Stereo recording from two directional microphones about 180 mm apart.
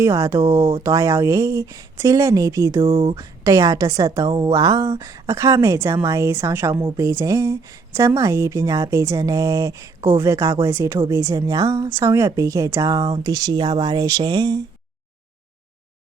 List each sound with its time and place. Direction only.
0.0 s speech: 15° right (ahead or behind)
3.0 s speech: 25° right (ahead or behind)